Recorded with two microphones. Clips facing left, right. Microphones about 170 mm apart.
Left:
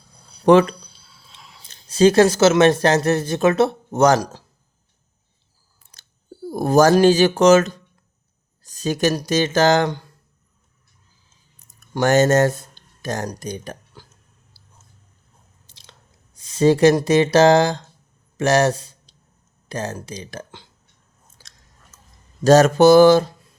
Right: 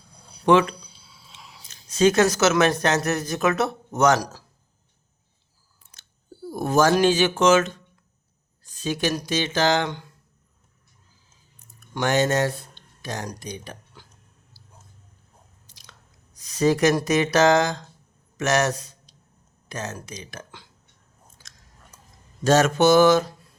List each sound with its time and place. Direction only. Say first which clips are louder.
0.4 s speech: left 5 dB; 40° left (ahead or behind)
0.9 s a sound: even; 10° right (ahead or behind)
1.6 s speech: left 4 dB; 30° left (ahead or behind)
5.9 s chewing: left 2 dB; 35° left (ahead or behind)
6.5 s speech: left 5 dB; 35° left (ahead or behind)
11.6 s a sound: left 6 dB; 40° left (ahead or behind)
14.5 s a sound: right 3 dB; 15° right (ahead or behind)
15.6 s chewing: left 1 dB; 25° left (ahead or behind)
18.3 s speech: left 5 dB; 30° left (ahead or behind)
21.4 s biting: left 1 dB; 30° left (ahead or behind)
22.4 s speech: left 6 dB; 35° left (ahead or behind)